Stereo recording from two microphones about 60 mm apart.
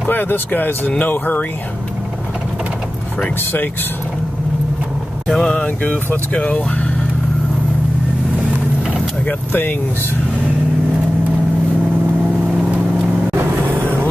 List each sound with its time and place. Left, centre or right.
0.1 s speech: left
5.3 s mantra: centre
6.3 s speech: left
9.2 s speech: left
13.3 s vehicle: right